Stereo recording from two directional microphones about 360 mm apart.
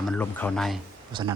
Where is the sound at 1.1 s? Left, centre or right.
Centre.